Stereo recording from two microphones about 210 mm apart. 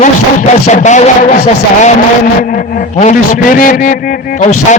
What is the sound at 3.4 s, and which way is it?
Speech, 40° left (ahead or behind).